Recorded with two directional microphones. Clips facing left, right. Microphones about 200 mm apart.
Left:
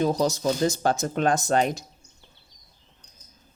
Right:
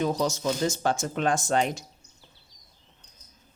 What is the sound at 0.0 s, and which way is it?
Speech, 35° left (ahead or behind).